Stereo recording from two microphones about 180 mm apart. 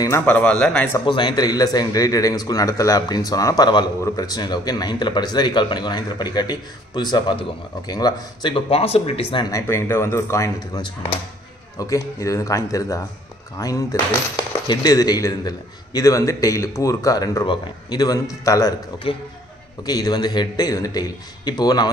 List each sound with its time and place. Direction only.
0.0 s speech: 10° left (ahead or behind)
0.9 s a man's voice: 25° left (ahead or behind)
19.1 s a man's voice: 30° left (ahead or behind)